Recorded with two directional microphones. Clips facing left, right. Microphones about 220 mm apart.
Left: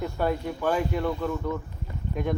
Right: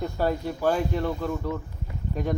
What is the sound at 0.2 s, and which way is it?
Speech, 40° right (ahead or behind).